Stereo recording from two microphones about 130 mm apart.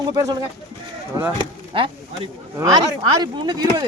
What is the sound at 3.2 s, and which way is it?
Speech, 35° right (ahead or behind).